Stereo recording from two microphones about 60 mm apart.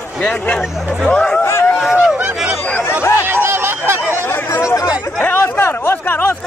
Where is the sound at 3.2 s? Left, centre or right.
Right.